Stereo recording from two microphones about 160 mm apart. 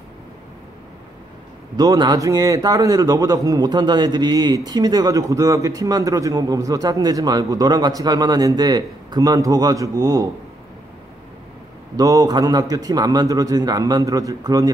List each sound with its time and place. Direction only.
1.8 s a man's voice: 25° right (ahead or behind)
12.0 s a man's voice: 20° right (ahead or behind)